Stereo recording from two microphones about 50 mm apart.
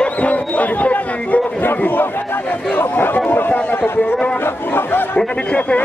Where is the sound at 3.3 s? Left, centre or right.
Left.